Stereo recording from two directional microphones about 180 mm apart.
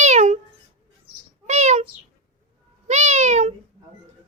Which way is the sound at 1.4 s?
40° right (ahead or behind).